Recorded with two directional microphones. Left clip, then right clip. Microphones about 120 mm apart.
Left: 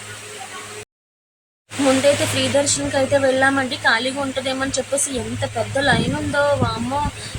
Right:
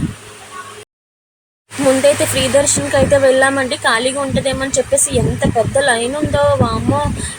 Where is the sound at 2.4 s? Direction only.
20° right (ahead or behind).